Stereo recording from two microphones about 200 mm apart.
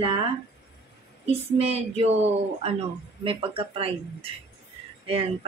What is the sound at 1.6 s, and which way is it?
A woman's voice, 30° right (ahead or behind).